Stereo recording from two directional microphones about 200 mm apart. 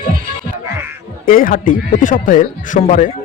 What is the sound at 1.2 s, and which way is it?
Speech, 45° left (ahead or behind).